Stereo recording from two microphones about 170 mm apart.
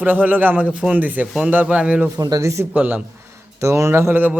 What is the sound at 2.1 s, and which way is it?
Speech, 20° right (ahead or behind).